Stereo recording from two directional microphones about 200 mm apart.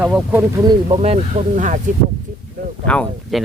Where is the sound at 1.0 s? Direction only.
35° right (ahead or behind).